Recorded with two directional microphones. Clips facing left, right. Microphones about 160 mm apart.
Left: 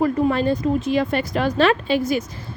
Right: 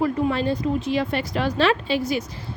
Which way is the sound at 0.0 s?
50° left (ahead or behind).